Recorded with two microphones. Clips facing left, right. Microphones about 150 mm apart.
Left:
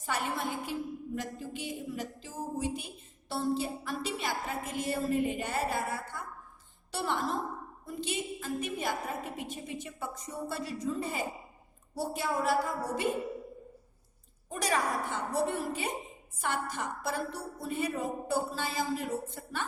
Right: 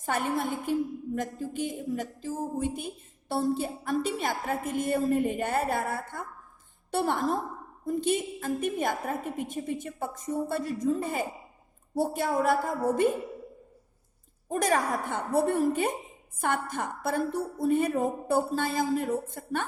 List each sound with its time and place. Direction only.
0.0 s a woman's voice: 50° right (ahead or behind)
14.5 s a woman's voice: 50° right (ahead or behind)